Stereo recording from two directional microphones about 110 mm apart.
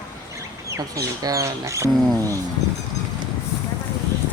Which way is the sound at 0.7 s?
30° right (ahead or behind).